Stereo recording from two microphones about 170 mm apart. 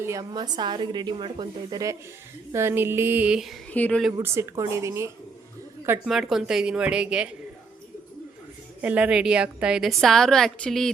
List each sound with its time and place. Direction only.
0.0 s speech: 20° right (ahead or behind); by 3.6 s 5° right (ahead or behind)
3.7 s speech: 10° left (ahead or behind)
4.2 s speech: 15° right (ahead or behind)
6.1 s a woman's voice: centre (ahead or behind)
8.8 s a woman's voice: 10° right (ahead or behind)